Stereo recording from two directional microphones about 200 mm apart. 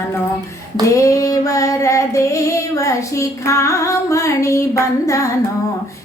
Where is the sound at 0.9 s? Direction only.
15° left (ahead or behind).